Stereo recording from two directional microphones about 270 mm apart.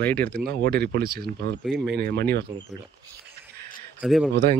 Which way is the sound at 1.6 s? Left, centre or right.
Centre.